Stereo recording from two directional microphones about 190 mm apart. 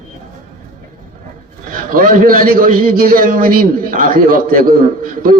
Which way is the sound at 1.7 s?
45° right (ahead or behind).